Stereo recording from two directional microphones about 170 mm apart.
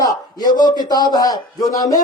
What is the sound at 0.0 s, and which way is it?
Speech, 25° left (ahead or behind).